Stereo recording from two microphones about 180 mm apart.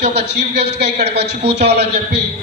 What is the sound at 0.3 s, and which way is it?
A man's voice, 65° right (ahead or behind).